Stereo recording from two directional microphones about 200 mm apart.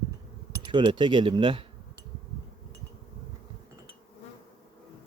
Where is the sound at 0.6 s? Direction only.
25° right (ahead or behind).